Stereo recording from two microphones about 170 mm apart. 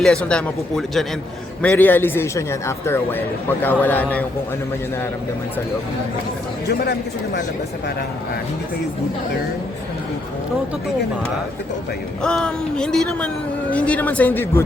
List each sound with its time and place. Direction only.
0.0 s a man's voice: 5° left (ahead or behind)
6.7 s speech: 70° left (ahead or behind)
12.2 s a man's voice: 5° left (ahead or behind)